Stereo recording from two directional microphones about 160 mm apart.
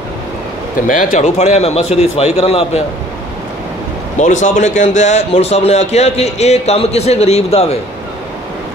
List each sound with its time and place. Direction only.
0.8 s a man's voice: 55° left (ahead or behind)
4.2 s a man's voice: 50° left (ahead or behind)